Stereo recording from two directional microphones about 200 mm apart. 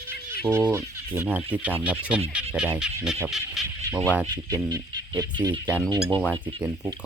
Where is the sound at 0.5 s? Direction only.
10° right (ahead or behind).